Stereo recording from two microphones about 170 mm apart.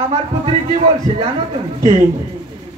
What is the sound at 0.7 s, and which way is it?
Speech, 35° right (ahead or behind).